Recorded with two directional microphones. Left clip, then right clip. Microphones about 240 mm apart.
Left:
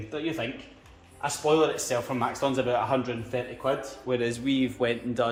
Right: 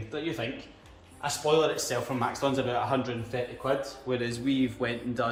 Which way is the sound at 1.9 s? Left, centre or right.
Left.